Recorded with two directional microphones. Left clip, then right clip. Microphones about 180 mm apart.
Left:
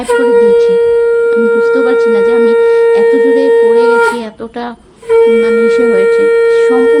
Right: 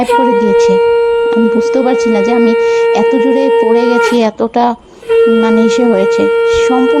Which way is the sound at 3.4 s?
45° right (ahead or behind).